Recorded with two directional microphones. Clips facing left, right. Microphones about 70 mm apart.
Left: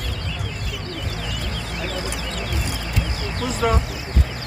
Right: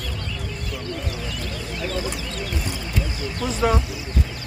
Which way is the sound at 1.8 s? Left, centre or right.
Left.